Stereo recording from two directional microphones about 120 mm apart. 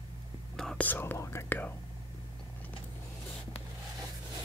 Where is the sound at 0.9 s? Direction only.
20° left (ahead or behind).